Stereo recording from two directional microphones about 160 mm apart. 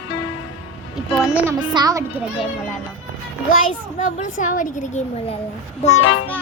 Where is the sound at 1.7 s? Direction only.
25° right (ahead or behind).